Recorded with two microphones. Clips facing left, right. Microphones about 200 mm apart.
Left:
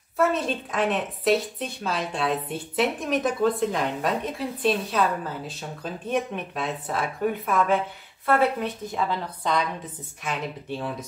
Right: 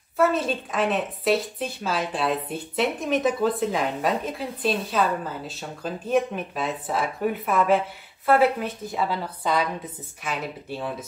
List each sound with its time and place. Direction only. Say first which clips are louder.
0.2 s a woman's voice: right 1 dB; centre (ahead or behind)